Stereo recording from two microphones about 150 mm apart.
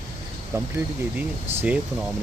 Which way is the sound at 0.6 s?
15° right (ahead or behind).